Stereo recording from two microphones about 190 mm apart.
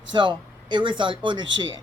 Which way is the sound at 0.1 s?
25° right (ahead or behind).